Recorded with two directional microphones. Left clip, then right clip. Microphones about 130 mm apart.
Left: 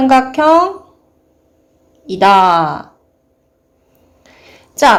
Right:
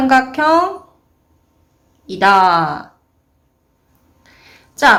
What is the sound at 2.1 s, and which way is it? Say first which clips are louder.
Speech: left 2 dB; 30° left (ahead or behind).